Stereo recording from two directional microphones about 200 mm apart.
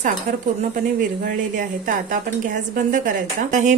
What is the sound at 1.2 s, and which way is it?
A woman's voice, 40° right (ahead or behind).